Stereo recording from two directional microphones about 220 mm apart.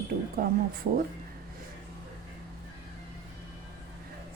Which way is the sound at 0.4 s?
40° right (ahead or behind).